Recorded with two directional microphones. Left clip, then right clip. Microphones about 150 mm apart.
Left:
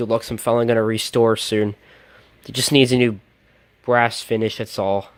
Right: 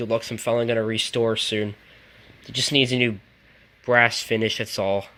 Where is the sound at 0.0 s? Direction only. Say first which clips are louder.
Left 4 dB; 35° left (ahead or behind).